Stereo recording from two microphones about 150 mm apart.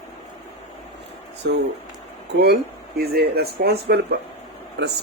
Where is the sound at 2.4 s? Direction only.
90° right.